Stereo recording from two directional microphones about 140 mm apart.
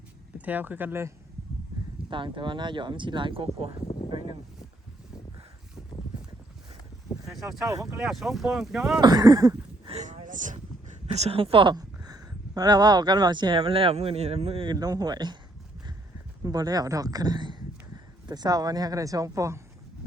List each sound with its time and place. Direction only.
0.3 s speech: 10° right (ahead or behind)
2.0 s speech: 35° right (ahead or behind)
7.3 s speech: centre (ahead or behind)
7.7 s speech: 25° right (ahead or behind)
7.9 s speech: 5° right (ahead or behind)
9.0 s a sound: 30° right (ahead or behind)
9.9 s a sound: 55° right (ahead or behind)
11.0 s speech: 50° right (ahead or behind)
14.7 s speech: 25° right (ahead or behind)
16.4 s speech: 25° right (ahead or behind)